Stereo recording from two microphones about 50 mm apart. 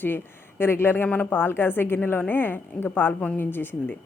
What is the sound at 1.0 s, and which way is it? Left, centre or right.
Speech, left.